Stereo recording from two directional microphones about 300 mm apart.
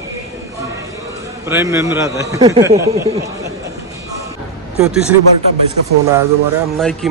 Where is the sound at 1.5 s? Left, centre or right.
Centre.